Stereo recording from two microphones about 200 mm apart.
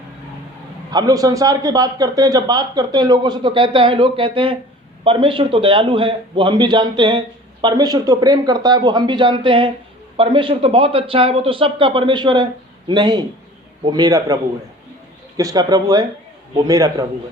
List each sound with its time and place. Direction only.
0.9 s a man's voice: 20° right (ahead or behind)
15.4 s a man's voice: 20° right (ahead or behind)